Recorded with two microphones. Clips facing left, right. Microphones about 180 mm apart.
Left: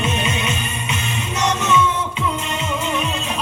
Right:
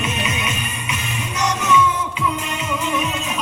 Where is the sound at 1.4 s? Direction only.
25° left (ahead or behind).